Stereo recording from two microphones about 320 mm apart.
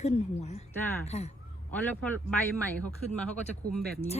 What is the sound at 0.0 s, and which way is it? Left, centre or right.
A woman's voice, left.